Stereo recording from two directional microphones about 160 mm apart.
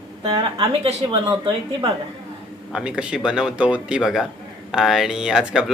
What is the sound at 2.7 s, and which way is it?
Speech, 5° right (ahead or behind).